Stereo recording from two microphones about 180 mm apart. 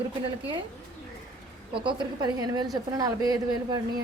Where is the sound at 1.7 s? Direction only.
25° right (ahead or behind).